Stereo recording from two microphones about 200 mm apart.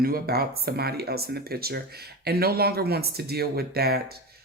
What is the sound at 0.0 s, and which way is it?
Speech, 50° right (ahead or behind).